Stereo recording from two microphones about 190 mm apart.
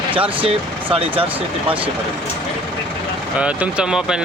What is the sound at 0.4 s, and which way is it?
Speech, 30° right (ahead or behind).